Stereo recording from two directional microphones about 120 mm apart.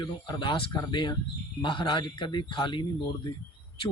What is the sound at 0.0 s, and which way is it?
Speech, 40° left (ahead or behind).